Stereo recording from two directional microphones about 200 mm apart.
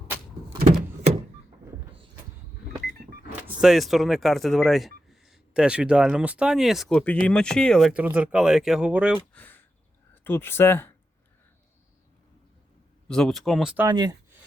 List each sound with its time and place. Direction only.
0.6 s door: 30° right (ahead or behind)
3.4 s speech: 5° right (ahead or behind)
9.3 s a sound: 10° left (ahead or behind)
10.2 s speech: 10° left (ahead or behind)
13.1 s speech: centre (ahead or behind)
13.8 s speech: 20° right (ahead or behind)